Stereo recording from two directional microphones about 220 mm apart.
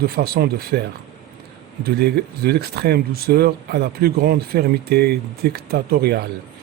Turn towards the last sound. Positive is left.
turn(degrees=-45)  # may be behind; listen again after turning